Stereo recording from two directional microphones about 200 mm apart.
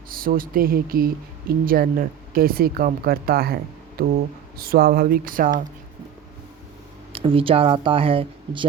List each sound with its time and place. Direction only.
0.1 s speech: 45° right (ahead or behind)
7.1 s speech: 25° right (ahead or behind)